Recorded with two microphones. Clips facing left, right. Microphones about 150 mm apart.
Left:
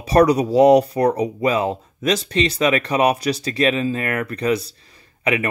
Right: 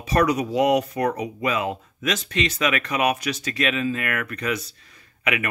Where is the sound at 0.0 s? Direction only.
35° left (ahead or behind).